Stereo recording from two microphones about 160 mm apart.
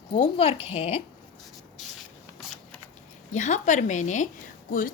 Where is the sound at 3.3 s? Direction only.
50° left (ahead or behind).